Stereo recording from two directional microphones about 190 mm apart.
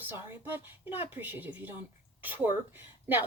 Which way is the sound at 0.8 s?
30° left (ahead or behind).